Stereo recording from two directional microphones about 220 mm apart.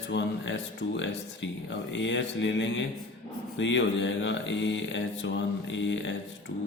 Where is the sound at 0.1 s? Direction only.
55° left (ahead or behind).